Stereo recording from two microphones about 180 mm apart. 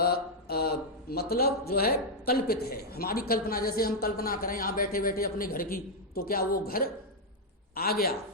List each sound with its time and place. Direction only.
0.0 s a man's voice: 60° left (ahead or behind)